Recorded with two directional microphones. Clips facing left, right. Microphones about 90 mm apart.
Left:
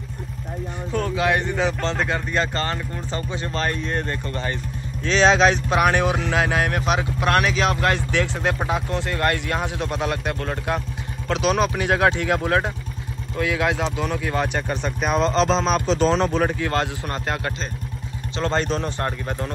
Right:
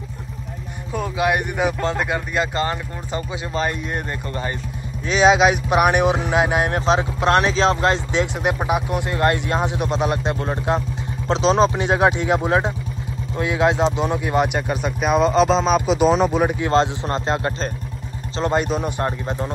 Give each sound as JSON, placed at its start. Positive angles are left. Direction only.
{"t": 0.9, "sound": "speech", "side_deg": -15}
{"t": 16.6, "sound": "speech", "side_deg": -20}
{"t": 18.4, "sound": "speech", "side_deg": -10}